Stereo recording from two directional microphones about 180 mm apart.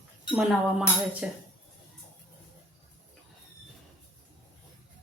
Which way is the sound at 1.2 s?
10° right (ahead or behind).